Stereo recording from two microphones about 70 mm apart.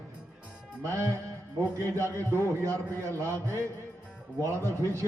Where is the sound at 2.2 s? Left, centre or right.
Left.